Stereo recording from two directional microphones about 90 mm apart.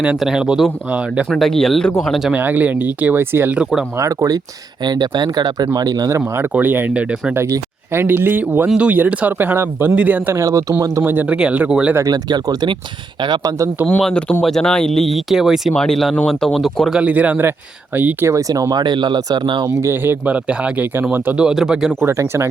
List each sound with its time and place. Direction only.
0.2 s speech: 5° right (ahead or behind)
1.3 s speech: 5° left (ahead or behind)
2.3 s speech: 20° right (ahead or behind)
3.9 s speech: 35° right (ahead or behind)
4.8 s speech: 55° right (ahead or behind); by 8.6 s 20° right (ahead or behind)
8.6 s speech: 10° right (ahead or behind)
10.3 s speech: 35° right (ahead or behind)
11.0 s speech: 20° right (ahead or behind)
12.1 s speech: 45° right (ahead or behind)
14.0 s speech: 10° left (ahead or behind)
16.9 s speech: 15° right (ahead or behind)
18.3 s speech: 40° right (ahead or behind); by 19.6 s 60° right (ahead or behind)
19.6 s speech: 25° right (ahead or behind); by 21.9 s 5° right (ahead or behind)
22.0 s speech: 30° right (ahead or behind)